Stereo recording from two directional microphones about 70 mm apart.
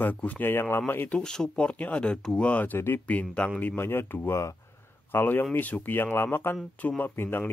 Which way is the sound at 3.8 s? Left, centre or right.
Left.